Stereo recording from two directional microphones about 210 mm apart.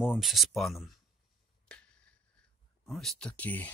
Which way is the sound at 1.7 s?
5° left (ahead or behind).